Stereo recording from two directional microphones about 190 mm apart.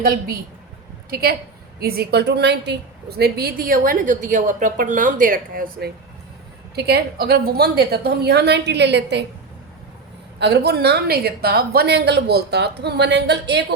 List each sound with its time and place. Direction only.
1.1 s a woman's voice: 55° right (ahead or behind)
10.4 s a woman's voice: 60° right (ahead or behind)